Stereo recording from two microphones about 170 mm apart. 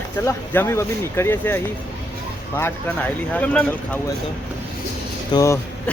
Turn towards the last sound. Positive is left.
turn(degrees=20)  # may be behind; listen again after turning